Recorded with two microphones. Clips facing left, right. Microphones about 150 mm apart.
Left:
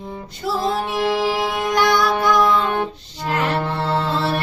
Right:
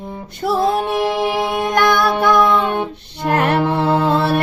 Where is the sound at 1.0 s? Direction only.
20° right (ahead or behind).